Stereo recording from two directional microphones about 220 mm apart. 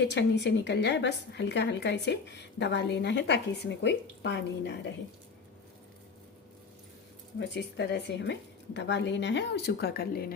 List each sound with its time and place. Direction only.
0.0 s a woman's voice: 50° left (ahead or behind)
7.3 s a woman's voice: 50° left (ahead or behind)